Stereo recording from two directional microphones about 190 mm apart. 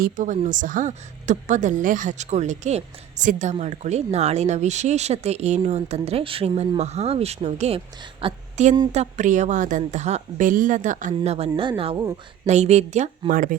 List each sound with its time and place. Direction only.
0.0 s a woman's voice: 40° right (ahead or behind)